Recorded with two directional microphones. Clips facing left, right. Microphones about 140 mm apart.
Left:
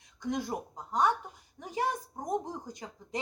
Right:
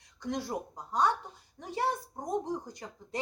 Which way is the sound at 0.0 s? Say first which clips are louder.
Left 2 dB; 15° left (ahead or behind).